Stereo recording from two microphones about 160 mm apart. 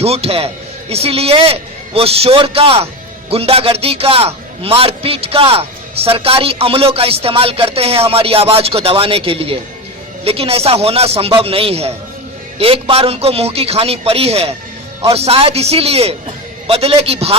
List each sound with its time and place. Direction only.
0.0 s a man's voice: 40° right (ahead or behind)